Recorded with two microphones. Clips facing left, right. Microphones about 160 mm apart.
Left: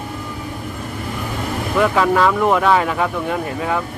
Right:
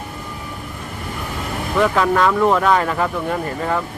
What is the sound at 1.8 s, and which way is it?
Speech, centre (ahead or behind).